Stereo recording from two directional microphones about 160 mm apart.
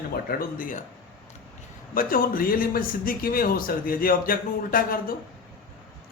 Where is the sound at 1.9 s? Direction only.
65° left (ahead or behind).